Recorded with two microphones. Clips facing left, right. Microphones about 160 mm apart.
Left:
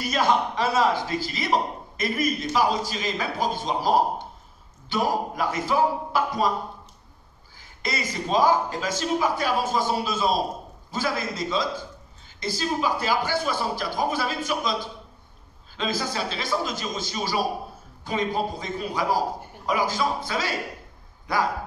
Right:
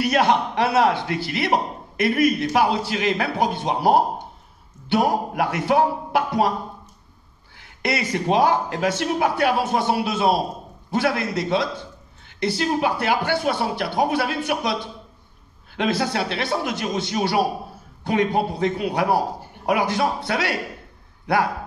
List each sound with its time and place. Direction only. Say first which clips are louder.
0.0 s a man's voice: right 4 dB; 65° right (ahead or behind)
7.5 s a man's voice: right 6 dB; 65° right (ahead or behind)